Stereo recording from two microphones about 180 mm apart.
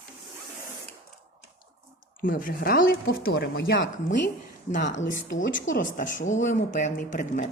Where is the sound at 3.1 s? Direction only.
65° left (ahead or behind).